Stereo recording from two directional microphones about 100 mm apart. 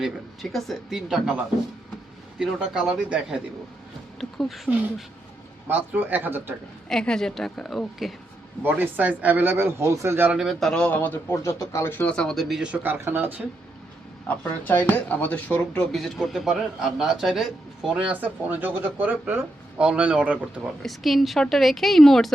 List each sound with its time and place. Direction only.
0.5 s a man's voice: centre (ahead or behind)
2.4 s a man's voice: 5° right (ahead or behind)
5.6 s speech: 20° right (ahead or behind)
6.8 s a man's voice: 5° left (ahead or behind)
8.6 s speech: 20° right (ahead or behind)
10.3 s a man's voice: centre (ahead or behind); by 13.4 s 20° right (ahead or behind)
14.3 s speech: 15° left (ahead or behind)
15.9 s a man's voice: centre (ahead or behind)
18.1 s speech: 15° right (ahead or behind)
20.8 s a man's voice: centre (ahead or behind)